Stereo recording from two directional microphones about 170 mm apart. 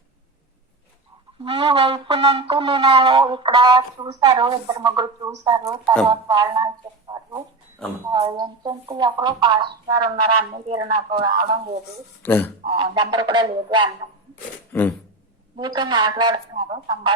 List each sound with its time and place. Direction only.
1.5 s wind instrument: 30° right (ahead or behind)
7.1 s chicken: 30° right (ahead or behind)
8.1 s wind instrument: 25° right (ahead or behind)
12.2 s speech: 10° left (ahead or behind)
12.6 s wind instrument: 25° right (ahead or behind)
14.7 s a sound: 10° left (ahead or behind)
15.5 s wind instrument: 25° right (ahead or behind)